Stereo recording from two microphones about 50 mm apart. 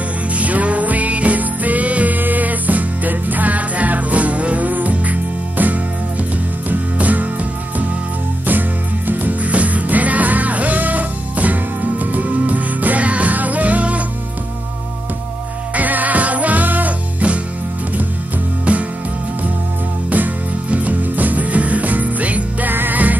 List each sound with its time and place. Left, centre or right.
0.3 s music: right
8.5 s music: right
15.7 s music: right
18.7 s music: right
20.7 s music: right